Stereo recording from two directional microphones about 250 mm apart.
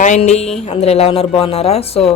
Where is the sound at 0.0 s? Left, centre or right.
Left.